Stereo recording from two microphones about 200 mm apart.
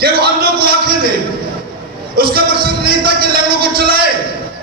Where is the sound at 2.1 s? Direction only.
50° right (ahead or behind).